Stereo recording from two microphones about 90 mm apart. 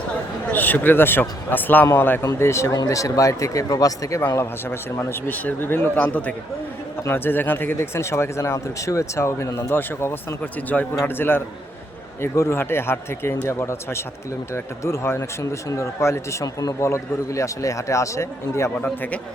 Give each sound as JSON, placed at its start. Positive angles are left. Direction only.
{"t": 0.5, "sound": "speech", "side_deg": 20}
{"t": 4.4, "sound": "a man's voice", "side_deg": 25}
{"t": 18.8, "sound": "a man's voice", "side_deg": 15}